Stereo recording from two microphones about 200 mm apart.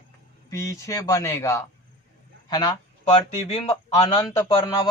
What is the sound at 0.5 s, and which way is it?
Speech, 15° left (ahead or behind).